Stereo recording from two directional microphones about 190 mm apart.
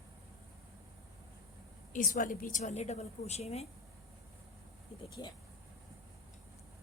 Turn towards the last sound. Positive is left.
turn(degrees=25)  # may be behind; listen again after turning